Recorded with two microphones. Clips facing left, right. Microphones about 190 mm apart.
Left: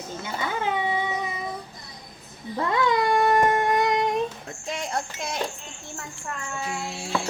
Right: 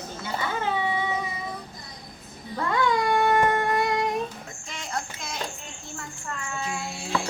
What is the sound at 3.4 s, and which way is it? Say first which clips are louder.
Music: left 2 dB; 20° left (ahead or behind).